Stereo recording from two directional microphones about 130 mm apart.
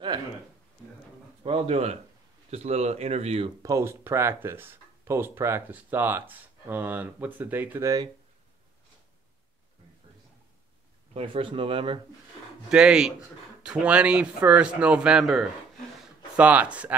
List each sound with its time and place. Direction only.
1.4 s speech: 50° right (ahead or behind)
3.6 s speech: 20° right (ahead or behind)
11.1 s speech: 45° right (ahead or behind)
12.6 s speech: 5° right (ahead or behind)